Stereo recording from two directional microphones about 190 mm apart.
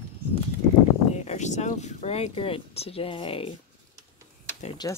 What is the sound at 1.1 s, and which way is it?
Speech, 35° left (ahead or behind).